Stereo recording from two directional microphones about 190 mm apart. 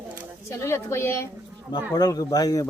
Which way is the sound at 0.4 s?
15° left (ahead or behind).